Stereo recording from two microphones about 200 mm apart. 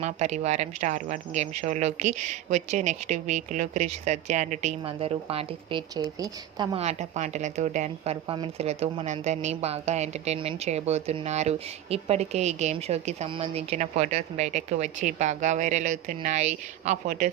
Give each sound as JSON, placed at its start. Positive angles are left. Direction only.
{"t": 0.0, "sound": "speech", "side_deg": -35}
{"t": 6.7, "sound": "speech", "side_deg": -35}